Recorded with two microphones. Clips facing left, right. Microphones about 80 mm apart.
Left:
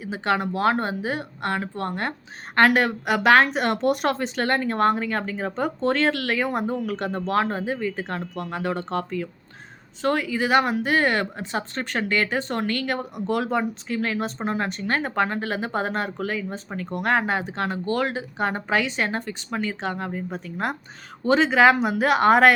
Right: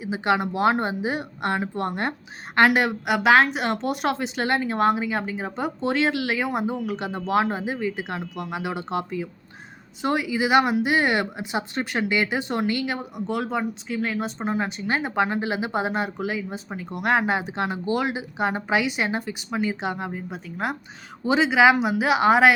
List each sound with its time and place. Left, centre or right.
0.0 s a woman's voice: centre